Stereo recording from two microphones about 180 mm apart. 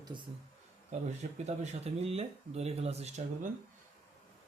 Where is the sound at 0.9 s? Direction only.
40° right (ahead or behind).